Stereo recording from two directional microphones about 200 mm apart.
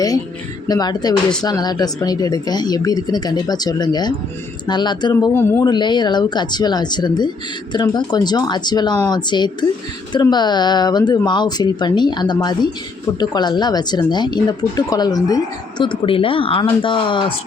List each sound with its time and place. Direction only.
0.7 s speech: 20° left (ahead or behind)
5.3 s speech: 10° left (ahead or behind)